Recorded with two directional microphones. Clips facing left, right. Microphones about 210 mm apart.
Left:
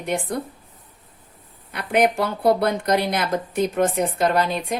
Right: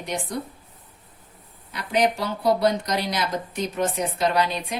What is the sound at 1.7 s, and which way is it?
Speech, 55° left (ahead or behind).